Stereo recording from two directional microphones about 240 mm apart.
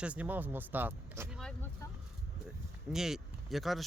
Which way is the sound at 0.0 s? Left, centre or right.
Centre.